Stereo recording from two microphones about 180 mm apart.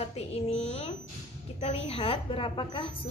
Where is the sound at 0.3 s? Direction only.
35° left (ahead or behind).